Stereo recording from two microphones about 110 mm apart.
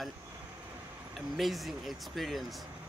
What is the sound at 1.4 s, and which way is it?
Speech, centre (ahead or behind).